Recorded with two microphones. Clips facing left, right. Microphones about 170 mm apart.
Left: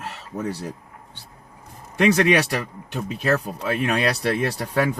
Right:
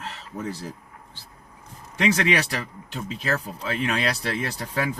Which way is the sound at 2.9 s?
60° left (ahead or behind).